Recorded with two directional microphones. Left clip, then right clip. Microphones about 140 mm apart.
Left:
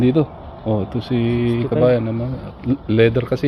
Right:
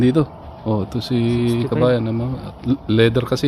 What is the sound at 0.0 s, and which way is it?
Speech, 35° right (ahead or behind).